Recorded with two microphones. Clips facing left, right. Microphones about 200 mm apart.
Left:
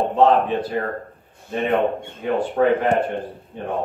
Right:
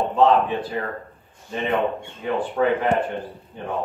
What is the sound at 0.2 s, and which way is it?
Speech, 50° left (ahead or behind).